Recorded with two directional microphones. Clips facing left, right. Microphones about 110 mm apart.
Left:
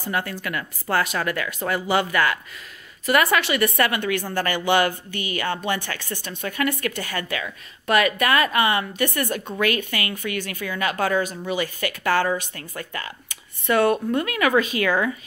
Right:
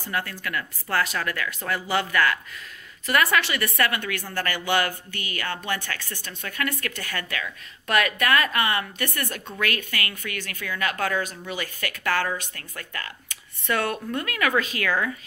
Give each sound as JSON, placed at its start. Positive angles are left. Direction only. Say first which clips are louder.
{"t": 0.1, "sound": "speech", "louder": "left 2 dB", "side_deg": 20}